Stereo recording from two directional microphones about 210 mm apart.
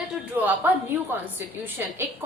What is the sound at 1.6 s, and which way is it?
Speech, 10° right (ahead or behind).